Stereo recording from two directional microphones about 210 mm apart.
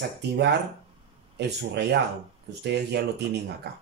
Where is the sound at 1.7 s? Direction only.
55° right (ahead or behind).